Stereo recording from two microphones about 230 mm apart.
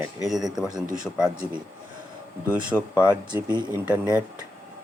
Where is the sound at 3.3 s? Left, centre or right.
Centre.